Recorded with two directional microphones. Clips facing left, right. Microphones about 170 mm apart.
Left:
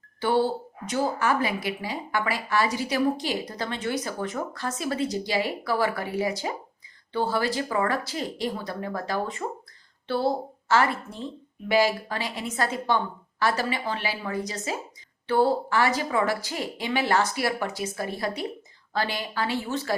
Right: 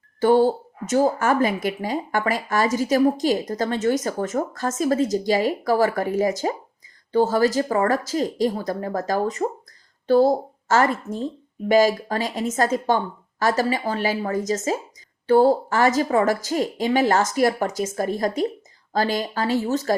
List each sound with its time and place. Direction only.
0.2 s speech: 45° right (ahead or behind)